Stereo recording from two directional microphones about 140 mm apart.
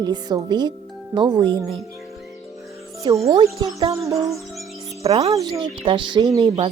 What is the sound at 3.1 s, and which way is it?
Speech, 30° right (ahead or behind).